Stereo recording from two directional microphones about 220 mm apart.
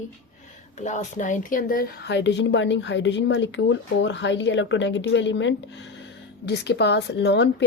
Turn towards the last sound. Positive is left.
turn(degrees=50)  # may be behind; listen again after turning